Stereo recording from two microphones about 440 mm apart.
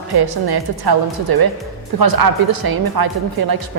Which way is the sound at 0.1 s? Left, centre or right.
Right.